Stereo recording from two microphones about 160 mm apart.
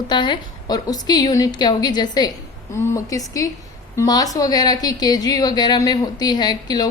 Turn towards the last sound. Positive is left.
turn(degrees=25)  # may be behind; listen again after turning